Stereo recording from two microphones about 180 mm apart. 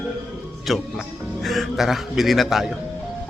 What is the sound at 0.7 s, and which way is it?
Speech, centre (ahead or behind).